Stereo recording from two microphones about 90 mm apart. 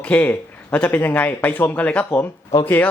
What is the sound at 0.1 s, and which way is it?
Speech, 15° left (ahead or behind).